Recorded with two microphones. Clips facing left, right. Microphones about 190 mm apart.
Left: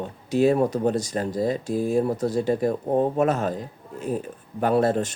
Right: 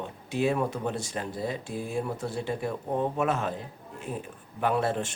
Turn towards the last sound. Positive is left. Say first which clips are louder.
# left 6 dB
turn(degrees=40)  # may be behind; listen again after turning